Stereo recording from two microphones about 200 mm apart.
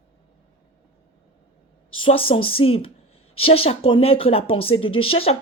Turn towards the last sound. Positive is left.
turn(degrees=30)  # may be behind; listen again after turning